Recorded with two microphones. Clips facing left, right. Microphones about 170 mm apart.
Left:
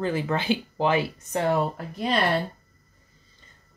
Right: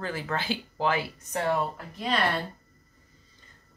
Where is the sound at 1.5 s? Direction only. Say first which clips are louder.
Left 4 dB; 30° left (ahead or behind).